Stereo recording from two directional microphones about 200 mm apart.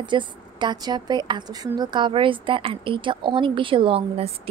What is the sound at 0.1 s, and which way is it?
A woman's voice, 20° right (ahead or behind).